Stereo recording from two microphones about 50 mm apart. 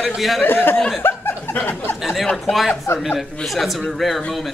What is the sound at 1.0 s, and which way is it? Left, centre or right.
Chuckle, left.